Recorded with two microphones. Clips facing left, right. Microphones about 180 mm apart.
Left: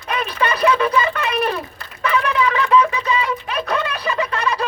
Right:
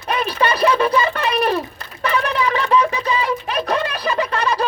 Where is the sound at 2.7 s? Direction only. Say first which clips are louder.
Left 1 dB; 35° right (ahead or behind).